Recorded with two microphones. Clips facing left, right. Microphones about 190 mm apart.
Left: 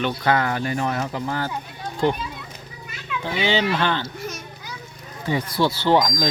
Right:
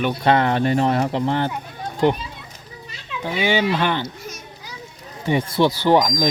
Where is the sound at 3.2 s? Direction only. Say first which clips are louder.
Right 2 dB; 15° right (ahead or behind).